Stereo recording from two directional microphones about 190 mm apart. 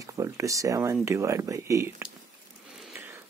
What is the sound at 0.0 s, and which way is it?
Speech, 15° right (ahead or behind).